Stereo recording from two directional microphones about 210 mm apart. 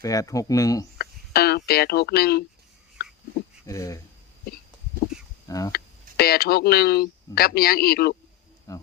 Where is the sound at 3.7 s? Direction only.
15° left (ahead or behind).